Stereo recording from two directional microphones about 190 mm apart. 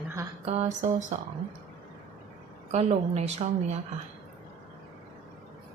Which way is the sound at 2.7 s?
35° right (ahead or behind).